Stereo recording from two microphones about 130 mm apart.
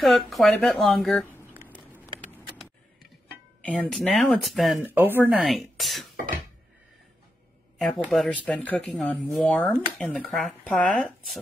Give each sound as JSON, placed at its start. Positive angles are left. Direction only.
{"t": 0.0, "sound": "speech", "side_deg": 0}
{"t": 3.6, "sound": "speech", "side_deg": 5}
{"t": 4.8, "sound": "speech", "side_deg": -15}
{"t": 5.3, "sound": "speech", "side_deg": 0}
{"t": 8.1, "sound": "speech", "side_deg": 5}